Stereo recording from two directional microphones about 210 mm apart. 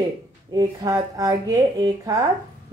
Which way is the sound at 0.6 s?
15° right (ahead or behind).